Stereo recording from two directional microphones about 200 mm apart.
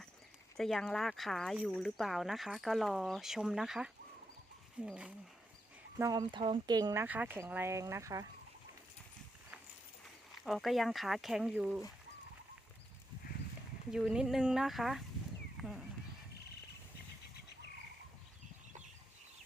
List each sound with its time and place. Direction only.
0.5 s speech: centre (ahead or behind)
6.0 s speech: 20° right (ahead or behind)
10.3 s speech: centre (ahead or behind)
13.9 s speech: 5° right (ahead or behind)
15.5 s horse: centre (ahead or behind)